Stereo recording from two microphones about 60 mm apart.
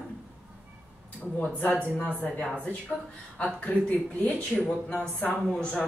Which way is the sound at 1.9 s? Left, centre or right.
Left.